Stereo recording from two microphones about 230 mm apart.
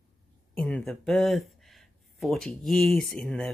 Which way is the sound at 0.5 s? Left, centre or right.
Centre.